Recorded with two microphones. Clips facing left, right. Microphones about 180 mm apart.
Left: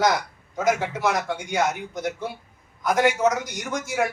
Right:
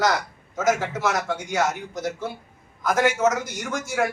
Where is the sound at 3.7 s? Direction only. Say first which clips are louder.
Even; centre (ahead or behind).